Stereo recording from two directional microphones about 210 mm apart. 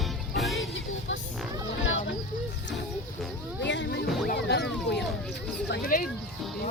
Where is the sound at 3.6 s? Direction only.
55° left (ahead or behind).